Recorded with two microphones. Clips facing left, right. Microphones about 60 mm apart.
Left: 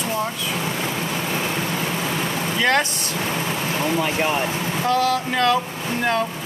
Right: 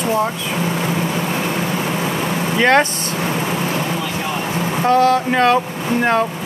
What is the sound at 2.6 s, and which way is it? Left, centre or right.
Speech, right.